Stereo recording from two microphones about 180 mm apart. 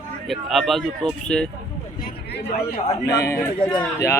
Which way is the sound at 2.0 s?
65° left (ahead or behind).